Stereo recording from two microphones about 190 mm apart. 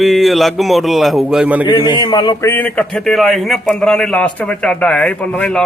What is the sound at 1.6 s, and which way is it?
A man's voice, 25° left (ahead or behind).